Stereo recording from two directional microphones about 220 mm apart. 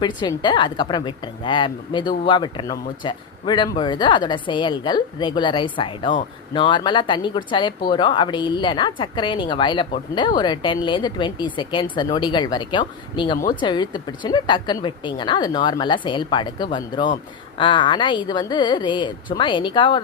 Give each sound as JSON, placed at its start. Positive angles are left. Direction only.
{"t": 0.2, "sound": "a woman's voice", "side_deg": 20}